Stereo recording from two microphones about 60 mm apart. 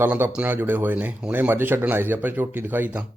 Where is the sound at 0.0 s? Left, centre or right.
Right.